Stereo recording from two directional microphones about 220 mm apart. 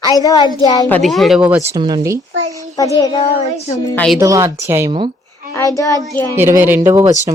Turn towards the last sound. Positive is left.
turn(degrees=-10)  # may be behind; listen again after turning